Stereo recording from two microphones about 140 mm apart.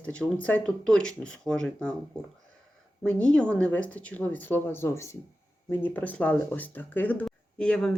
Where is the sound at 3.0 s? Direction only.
5° left (ahead or behind).